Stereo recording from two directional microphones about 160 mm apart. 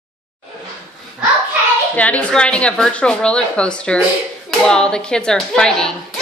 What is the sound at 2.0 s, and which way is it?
Speech, 10° left (ahead or behind).